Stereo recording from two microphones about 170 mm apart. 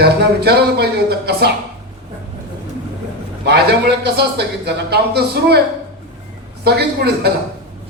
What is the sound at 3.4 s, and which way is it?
A man's voice, 75° right (ahead or behind).